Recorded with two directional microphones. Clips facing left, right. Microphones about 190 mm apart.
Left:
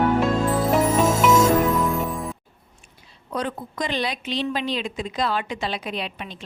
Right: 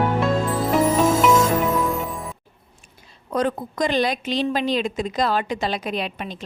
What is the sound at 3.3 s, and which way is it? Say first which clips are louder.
A woman's voice: right 5 dB; 45° right (ahead or behind).